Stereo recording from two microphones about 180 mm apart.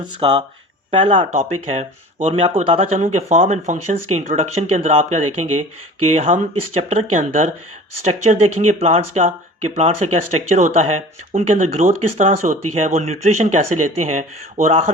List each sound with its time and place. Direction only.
0.0 s speech: 25° right (ahead or behind)